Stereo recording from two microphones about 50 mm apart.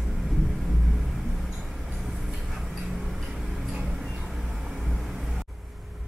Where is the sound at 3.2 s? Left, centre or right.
Centre.